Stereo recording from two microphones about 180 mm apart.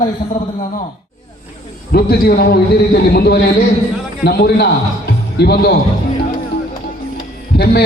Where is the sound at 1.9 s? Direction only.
60° left (ahead or behind).